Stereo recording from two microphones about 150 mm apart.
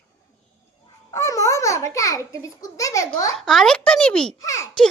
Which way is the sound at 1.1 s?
20° left (ahead or behind).